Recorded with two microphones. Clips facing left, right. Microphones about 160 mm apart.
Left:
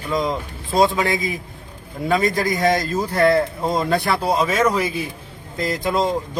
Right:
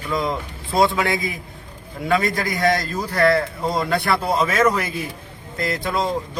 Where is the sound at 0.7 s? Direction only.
20° left (ahead or behind).